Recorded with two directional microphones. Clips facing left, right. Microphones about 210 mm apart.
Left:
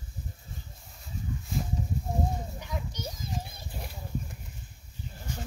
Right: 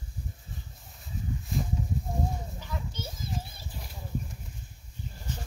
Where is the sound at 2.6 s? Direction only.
15° left (ahead or behind).